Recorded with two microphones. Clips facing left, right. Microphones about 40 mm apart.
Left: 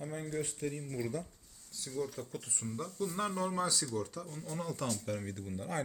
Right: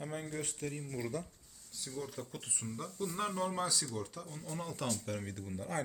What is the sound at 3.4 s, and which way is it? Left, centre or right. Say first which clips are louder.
Speech: left 2 dB; centre.